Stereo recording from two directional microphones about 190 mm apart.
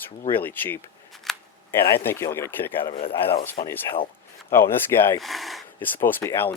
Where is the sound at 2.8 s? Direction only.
30° left (ahead or behind).